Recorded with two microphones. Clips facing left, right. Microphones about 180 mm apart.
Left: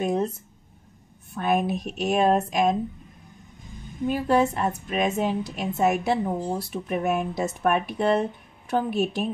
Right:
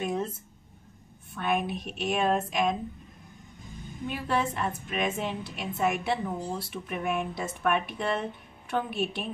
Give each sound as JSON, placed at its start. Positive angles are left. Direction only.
{"t": 0.0, "sound": "a sound", "side_deg": 40}
{"t": 1.3, "sound": "a woman's voice", "side_deg": 40}
{"t": 4.1, "sound": "a woman's voice", "side_deg": 40}